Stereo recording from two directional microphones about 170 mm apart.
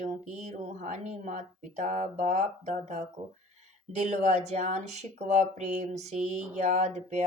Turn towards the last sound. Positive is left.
turn(degrees=-40)  # may be behind; listen again after turning